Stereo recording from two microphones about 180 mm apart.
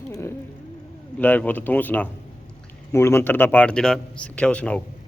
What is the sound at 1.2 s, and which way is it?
Speech, 10° left (ahead or behind).